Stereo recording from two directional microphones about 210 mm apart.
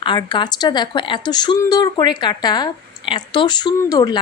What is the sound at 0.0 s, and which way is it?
A woman's voice, 20° left (ahead or behind).